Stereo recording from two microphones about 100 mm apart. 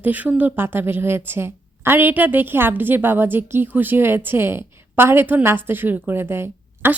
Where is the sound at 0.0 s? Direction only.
15° right (ahead or behind).